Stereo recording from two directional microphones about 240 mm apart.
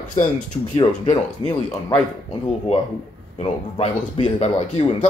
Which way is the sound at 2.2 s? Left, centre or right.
Left.